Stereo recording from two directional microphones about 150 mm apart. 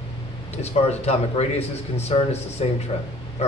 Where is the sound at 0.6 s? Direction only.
45° left (ahead or behind).